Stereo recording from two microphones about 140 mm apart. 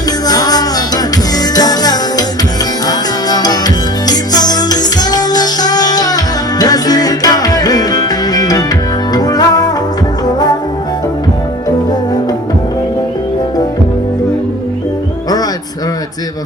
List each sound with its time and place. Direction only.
0.3 s music: 25° left (ahead or behind)